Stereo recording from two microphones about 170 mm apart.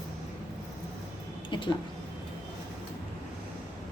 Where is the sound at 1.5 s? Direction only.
30° left (ahead or behind).